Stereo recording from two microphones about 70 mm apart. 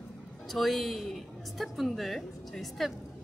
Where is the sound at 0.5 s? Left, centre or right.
Centre.